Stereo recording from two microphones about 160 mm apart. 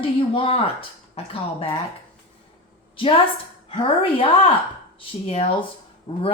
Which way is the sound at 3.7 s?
35° left (ahead or behind).